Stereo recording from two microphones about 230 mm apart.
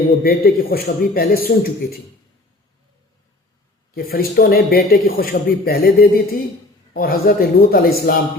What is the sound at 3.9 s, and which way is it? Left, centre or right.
Speech, left.